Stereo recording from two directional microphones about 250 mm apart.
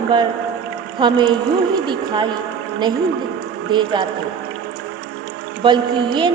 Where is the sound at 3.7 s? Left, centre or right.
Centre.